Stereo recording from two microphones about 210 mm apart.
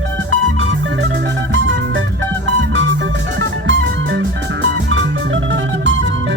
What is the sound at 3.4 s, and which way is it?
Music, 60° right (ahead or behind).